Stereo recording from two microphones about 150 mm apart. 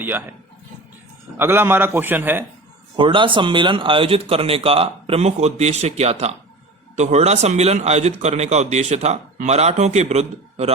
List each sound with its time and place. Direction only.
0.0 s a man's voice: 15° right (ahead or behind)
1.4 s a man's voice: 15° right (ahead or behind)
2.9 s a man's voice: 35° right (ahead or behind)